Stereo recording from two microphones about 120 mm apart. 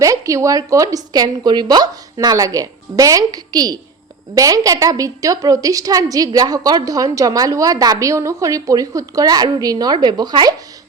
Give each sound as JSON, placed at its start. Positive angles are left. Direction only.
{"t": 0.0, "sound": "a woman's voice", "side_deg": -25}